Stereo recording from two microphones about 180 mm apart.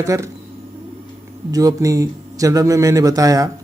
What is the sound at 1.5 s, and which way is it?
A man's voice, 20° right (ahead or behind).